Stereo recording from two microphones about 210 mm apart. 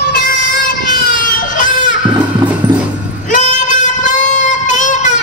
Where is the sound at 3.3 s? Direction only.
35° left (ahead or behind).